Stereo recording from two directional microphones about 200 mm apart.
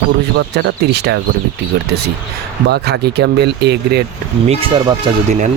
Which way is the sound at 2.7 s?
55° right (ahead or behind).